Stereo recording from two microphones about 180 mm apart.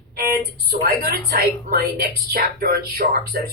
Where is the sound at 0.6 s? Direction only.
60° right (ahead or behind).